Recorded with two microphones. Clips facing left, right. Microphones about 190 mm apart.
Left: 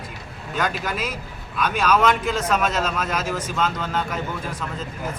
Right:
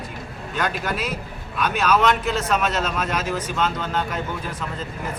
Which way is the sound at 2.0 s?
10° left (ahead or behind).